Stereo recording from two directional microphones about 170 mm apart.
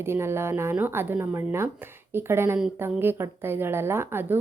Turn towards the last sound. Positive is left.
turn(degrees=-15)  # may be behind; listen again after turning